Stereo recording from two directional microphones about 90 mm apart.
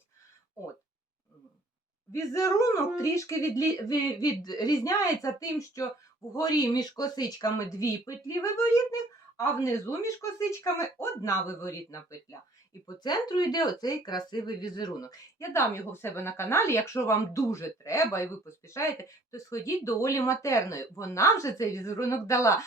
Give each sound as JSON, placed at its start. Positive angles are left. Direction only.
{"t": 2.1, "sound": "speech", "side_deg": 35}
{"t": 13.0, "sound": "speech", "side_deg": 50}
{"t": 15.4, "sound": "speech", "side_deg": 30}